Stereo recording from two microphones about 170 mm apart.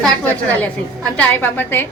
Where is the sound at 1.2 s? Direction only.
10° left (ahead or behind).